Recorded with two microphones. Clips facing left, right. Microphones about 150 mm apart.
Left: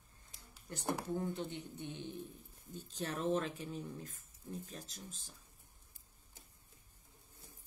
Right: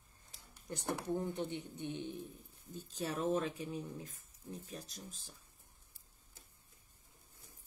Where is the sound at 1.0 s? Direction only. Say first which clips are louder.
Right 1 dB; 20° right (ahead or behind).